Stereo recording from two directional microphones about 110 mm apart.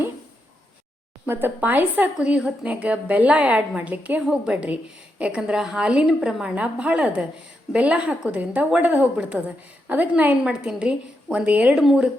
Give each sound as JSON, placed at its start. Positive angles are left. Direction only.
{"t": 1.3, "sound": "a woman's voice", "side_deg": -20}
{"t": 11.8, "sound": "speech", "side_deg": 0}